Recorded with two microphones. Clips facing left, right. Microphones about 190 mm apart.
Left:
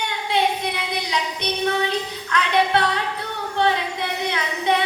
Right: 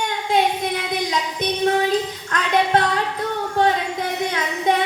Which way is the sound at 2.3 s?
45° right (ahead or behind).